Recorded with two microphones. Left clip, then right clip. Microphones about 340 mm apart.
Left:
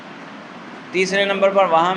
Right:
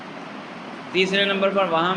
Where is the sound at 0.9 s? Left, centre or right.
Centre.